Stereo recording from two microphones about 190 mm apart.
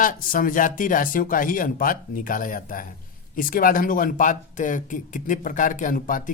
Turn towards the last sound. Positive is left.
turn(degrees=45)  # may be behind; listen again after turning